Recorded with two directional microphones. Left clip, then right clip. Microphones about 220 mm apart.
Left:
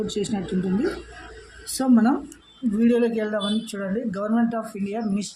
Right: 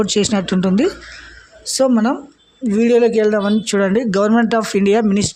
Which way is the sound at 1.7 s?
35° right (ahead or behind).